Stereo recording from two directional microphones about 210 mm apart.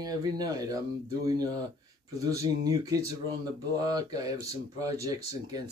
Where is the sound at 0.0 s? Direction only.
20° right (ahead or behind).